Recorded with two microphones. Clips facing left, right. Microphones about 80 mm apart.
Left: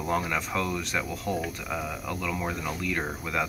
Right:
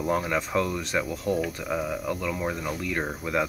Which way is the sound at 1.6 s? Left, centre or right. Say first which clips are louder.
Right 4 dB; centre.